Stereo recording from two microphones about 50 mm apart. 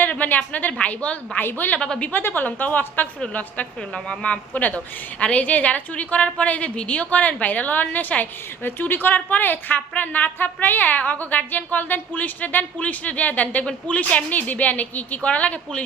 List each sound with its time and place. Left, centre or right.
0.0 s a woman's voice: left
1.4 s a woman's voice: left
3.9 s a woman's voice: left